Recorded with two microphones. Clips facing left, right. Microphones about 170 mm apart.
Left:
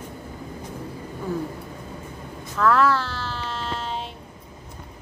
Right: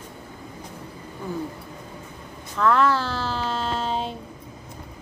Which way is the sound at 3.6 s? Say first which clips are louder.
Right 4 dB; 35° right (ahead or behind).